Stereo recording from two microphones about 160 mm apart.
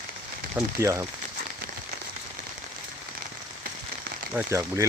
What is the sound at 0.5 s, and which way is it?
Speech, 15° right (ahead or behind).